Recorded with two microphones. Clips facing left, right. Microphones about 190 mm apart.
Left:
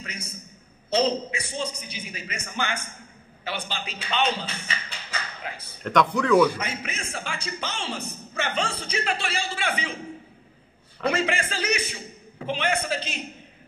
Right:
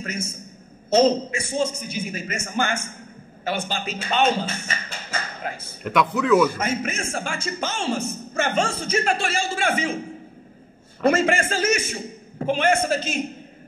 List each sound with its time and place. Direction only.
0.0 s speech: 45° right (ahead or behind)
5.9 s speech: 5° right (ahead or behind)
6.5 s speech: 45° right (ahead or behind)
11.0 s speech: 45° right (ahead or behind)